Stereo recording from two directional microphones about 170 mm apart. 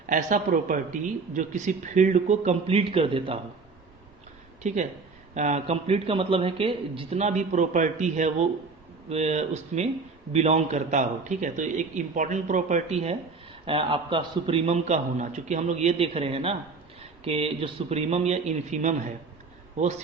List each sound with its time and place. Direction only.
0.1 s a man's voice: 50° right (ahead or behind); by 3.4 s 30° right (ahead or behind)
4.6 s a man's voice: 45° right (ahead or behind)